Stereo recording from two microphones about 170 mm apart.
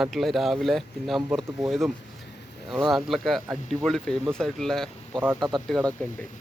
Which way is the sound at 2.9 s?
Centre (ahead or behind).